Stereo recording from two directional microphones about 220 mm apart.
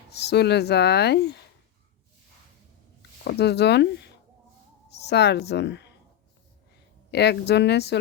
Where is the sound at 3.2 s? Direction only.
50° left (ahead or behind).